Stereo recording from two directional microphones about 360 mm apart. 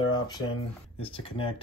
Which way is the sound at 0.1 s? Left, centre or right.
Centre.